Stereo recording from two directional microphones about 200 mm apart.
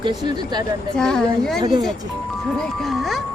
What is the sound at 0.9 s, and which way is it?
Speech, 5° left (ahead or behind).